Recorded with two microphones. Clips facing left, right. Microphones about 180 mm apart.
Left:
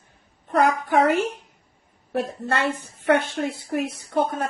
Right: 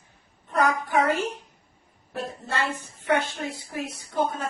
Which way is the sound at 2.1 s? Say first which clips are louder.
Left 5 dB; 65° left (ahead or behind).